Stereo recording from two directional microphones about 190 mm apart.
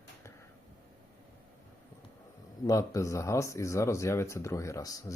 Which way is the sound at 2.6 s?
20° left (ahead or behind).